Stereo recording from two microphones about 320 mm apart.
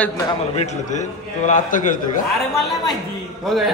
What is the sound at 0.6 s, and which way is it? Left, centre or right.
A man's voice, left.